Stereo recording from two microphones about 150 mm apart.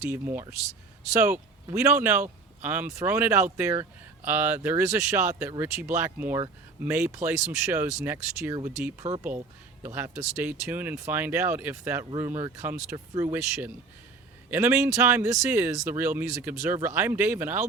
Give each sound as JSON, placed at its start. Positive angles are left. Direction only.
{"t": 0.0, "sound": "speech", "side_deg": -15}
{"t": 9.0, "sound": "speech", "side_deg": -50}
{"t": 9.8, "sound": "speech", "side_deg": -15}
{"t": 14.5, "sound": "speech", "side_deg": -15}